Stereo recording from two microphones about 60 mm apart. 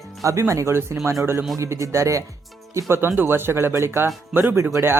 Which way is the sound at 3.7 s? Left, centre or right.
Right.